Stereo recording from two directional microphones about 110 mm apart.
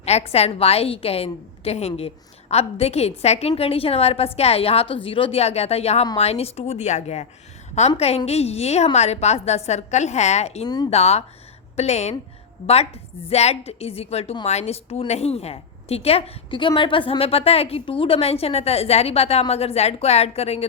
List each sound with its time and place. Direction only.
0.0 s a woman's voice: 75° left (ahead or behind); by 7.3 s 90° left
7.8 s a woman's voice: 75° left (ahead or behind)
11.8 s a woman's voice: 85° left
12.6 s a woman's voice: 65° left (ahead or behind)
14.4 s a woman's voice: 80° left